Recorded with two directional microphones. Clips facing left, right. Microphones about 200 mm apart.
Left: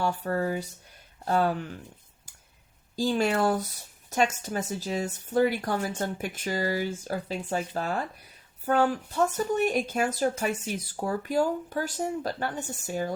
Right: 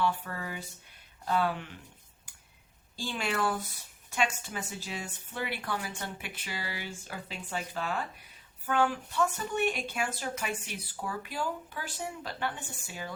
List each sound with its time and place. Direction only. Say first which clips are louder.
0.0 s speech: left 5 dB; 40° left (ahead or behind)
2.9 s speech: left 9 dB; 40° left (ahead or behind)